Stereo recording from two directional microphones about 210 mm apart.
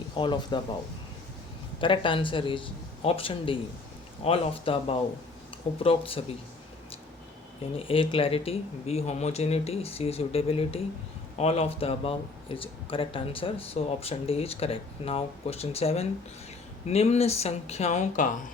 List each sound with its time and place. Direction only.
0.2 s speech: 20° left (ahead or behind)
1.8 s speech: 25° left (ahead or behind)
7.8 s speech: 25° left (ahead or behind)